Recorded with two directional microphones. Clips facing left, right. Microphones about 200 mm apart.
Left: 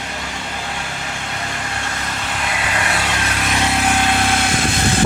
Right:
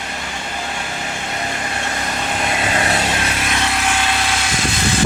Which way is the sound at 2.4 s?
25° right (ahead or behind).